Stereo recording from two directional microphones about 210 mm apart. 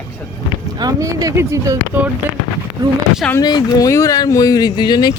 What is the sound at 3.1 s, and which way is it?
Speech, 5° left (ahead or behind).